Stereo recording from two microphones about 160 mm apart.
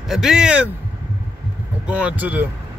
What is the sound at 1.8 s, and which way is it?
Speech, 10° right (ahead or behind).